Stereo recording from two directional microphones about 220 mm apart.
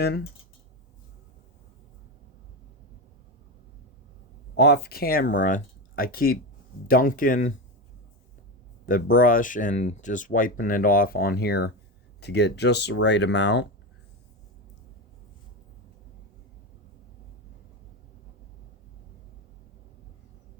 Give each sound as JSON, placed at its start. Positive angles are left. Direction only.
{"t": 4.5, "sound": "speech", "side_deg": 50}
{"t": 8.9, "sound": "speech", "side_deg": 40}